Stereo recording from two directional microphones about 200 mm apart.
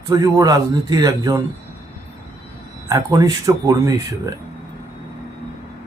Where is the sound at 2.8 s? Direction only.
15° right (ahead or behind).